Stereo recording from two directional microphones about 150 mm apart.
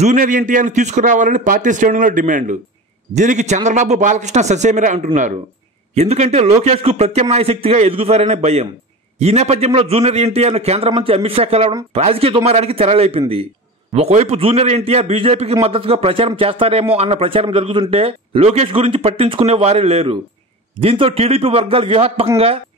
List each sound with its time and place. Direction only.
0.0 s a man's voice: 60° right (ahead or behind); by 22.3 s 40° right (ahead or behind)